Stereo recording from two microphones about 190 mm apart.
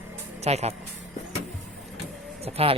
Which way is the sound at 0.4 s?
35° right (ahead or behind).